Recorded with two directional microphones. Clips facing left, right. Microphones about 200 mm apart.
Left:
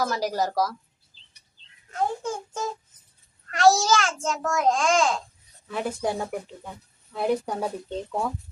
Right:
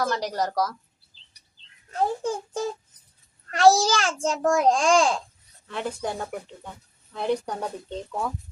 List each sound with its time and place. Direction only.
0.0 s a woman's voice: 5° left (ahead or behind)
1.9 s a child's voice: 35° right (ahead or behind)
5.6 s speech: 5° left (ahead or behind)